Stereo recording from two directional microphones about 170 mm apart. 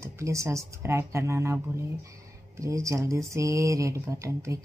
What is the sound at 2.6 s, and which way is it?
Speech, 20° right (ahead or behind).